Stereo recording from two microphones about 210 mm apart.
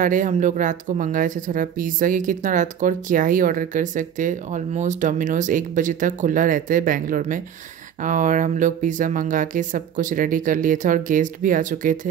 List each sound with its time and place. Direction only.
0.0 s speech: 40° right (ahead or behind)